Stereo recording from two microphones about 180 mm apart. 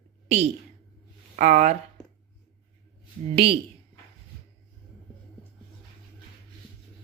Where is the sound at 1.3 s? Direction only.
45° right (ahead or behind).